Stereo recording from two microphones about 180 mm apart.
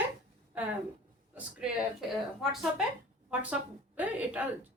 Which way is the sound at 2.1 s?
Centre (ahead or behind).